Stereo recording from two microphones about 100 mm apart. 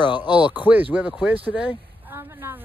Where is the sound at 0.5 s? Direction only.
15° right (ahead or behind).